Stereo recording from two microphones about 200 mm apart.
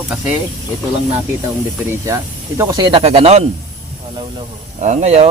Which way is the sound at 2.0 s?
15° right (ahead or behind).